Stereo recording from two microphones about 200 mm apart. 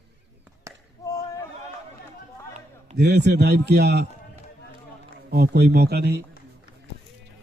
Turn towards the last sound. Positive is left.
turn(degrees=-55)  # may be behind; listen again after turning